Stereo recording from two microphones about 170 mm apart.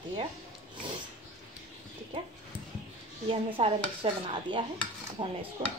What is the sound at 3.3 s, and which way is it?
A woman's voice, 30° right (ahead or behind).